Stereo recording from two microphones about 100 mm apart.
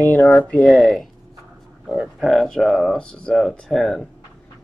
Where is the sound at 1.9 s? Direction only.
10° right (ahead or behind).